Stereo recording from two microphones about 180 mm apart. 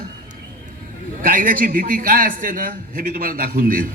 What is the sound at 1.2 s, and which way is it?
A man's voice, 50° right (ahead or behind).